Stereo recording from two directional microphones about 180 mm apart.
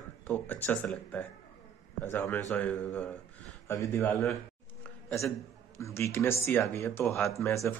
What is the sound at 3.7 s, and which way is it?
Speech, 15° left (ahead or behind).